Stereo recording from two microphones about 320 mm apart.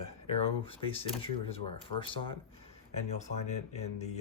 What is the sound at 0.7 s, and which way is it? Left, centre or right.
Speech, centre.